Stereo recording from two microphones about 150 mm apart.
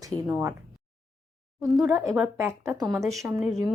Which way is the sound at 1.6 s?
5° right (ahead or behind).